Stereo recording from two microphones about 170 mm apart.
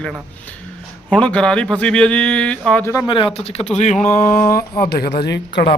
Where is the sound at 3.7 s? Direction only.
45° left (ahead or behind).